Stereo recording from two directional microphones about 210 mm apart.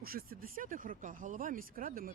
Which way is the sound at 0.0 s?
45° right (ahead or behind).